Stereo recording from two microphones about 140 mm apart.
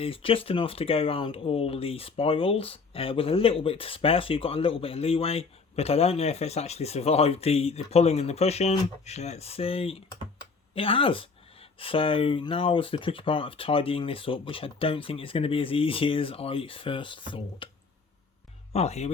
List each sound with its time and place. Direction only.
0.0 s speech: 40° left (ahead or behind)
18.7 s speech: 50° left (ahead or behind)